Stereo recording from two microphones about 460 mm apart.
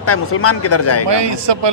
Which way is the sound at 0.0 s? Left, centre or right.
Left.